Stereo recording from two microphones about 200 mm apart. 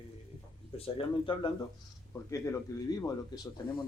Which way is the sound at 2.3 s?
15° left (ahead or behind).